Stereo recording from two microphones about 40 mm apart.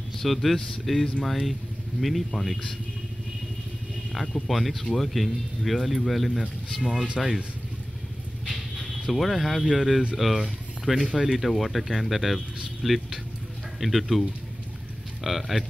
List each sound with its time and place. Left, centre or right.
0.2 s speech: centre
4.5 s speech: centre
7.2 s speech: centre
8.5 s speech: centre
12.8 s vehicle: centre
13.7 s speech: centre